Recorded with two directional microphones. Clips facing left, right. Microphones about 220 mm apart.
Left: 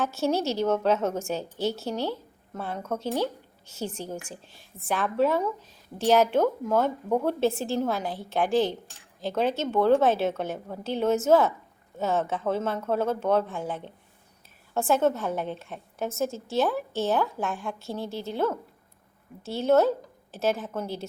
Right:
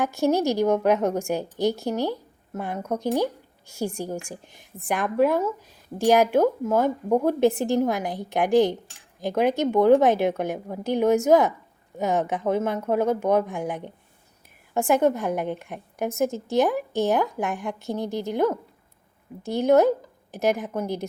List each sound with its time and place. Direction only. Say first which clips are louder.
0.0 s a woman's voice: right 4 dB; 15° right (ahead or behind)